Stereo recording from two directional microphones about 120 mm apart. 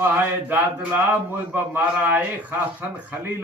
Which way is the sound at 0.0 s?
15° right (ahead or behind).